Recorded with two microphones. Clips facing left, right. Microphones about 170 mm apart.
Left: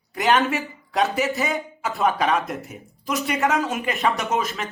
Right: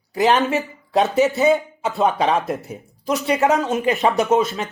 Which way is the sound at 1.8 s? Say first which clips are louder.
Right 3 dB; 20° right (ahead or behind).